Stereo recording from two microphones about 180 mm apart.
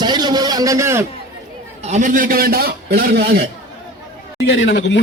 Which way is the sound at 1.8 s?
40° right (ahead or behind).